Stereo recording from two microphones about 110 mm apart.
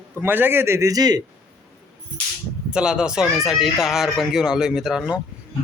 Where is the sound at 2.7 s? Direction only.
5° right (ahead or behind).